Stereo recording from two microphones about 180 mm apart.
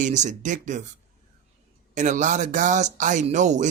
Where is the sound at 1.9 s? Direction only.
45° right (ahead or behind).